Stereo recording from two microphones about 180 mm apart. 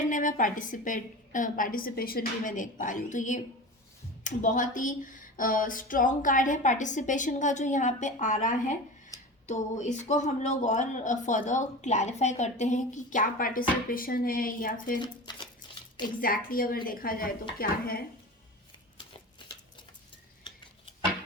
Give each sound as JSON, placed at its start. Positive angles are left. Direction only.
{"t": 0.1, "sound": "a woman's voice", "side_deg": 45}
{"t": 15.0, "sound": "a sound", "side_deg": 25}
{"t": 16.2, "sound": "a woman's voice", "side_deg": 50}